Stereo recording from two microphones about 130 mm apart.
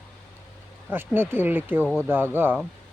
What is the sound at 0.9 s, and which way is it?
Speech, 15° right (ahead or behind).